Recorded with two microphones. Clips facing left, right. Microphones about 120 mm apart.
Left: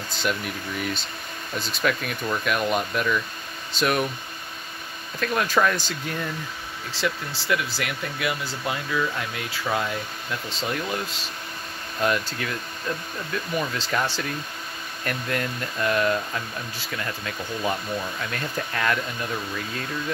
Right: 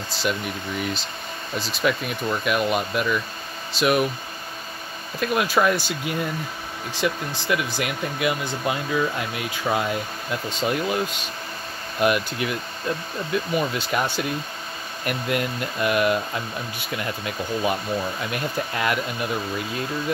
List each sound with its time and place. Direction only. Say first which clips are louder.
0.1 s speech: right 1 dB; 5° right (ahead or behind)
1.7 s speech: right 2 dB; 5° right (ahead or behind)
5.2 s speech: right 2 dB; 10° right (ahead or behind)
12.0 s speech: right 3 dB; 15° right (ahead or behind)